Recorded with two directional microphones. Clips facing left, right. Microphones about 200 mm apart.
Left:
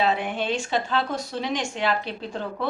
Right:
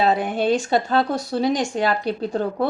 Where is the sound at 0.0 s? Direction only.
35° right (ahead or behind).